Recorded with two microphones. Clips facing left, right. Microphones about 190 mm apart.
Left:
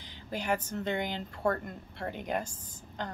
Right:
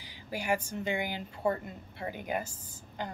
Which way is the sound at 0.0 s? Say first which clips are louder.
Left 1 dB; 10° right (ahead or behind).